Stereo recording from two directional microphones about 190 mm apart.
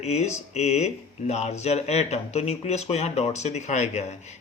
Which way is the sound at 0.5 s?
35° left (ahead or behind).